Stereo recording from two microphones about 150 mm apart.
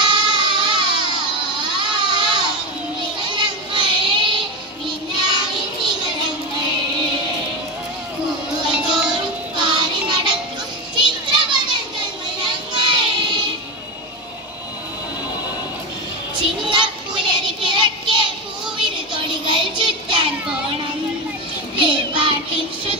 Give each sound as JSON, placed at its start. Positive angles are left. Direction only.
{"t": 0.1, "sound": "baby cry", "side_deg": -30}
{"t": 3.2, "sound": "child singing", "side_deg": -30}
{"t": 8.7, "sound": "music", "side_deg": -5}
{"t": 9.6, "sound": "music", "side_deg": -30}
{"t": 11.0, "sound": "children playing", "side_deg": -30}
{"t": 12.4, "sound": "child singing", "side_deg": -30}
{"t": 16.7, "sound": "child singing", "side_deg": -30}
{"t": 21.7, "sound": "child singing", "side_deg": -35}